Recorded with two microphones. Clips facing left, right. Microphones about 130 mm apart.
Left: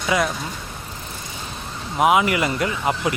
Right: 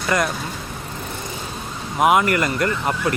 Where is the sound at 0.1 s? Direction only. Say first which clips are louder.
Even; 5° left (ahead or behind).